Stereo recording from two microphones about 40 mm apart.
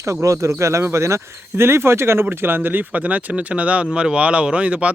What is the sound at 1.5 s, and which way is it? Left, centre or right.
Speech, right.